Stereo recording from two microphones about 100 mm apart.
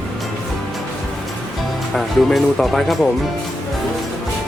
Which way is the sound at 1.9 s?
Centre (ahead or behind).